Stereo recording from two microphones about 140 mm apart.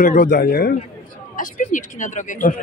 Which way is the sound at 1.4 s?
70° left (ahead or behind).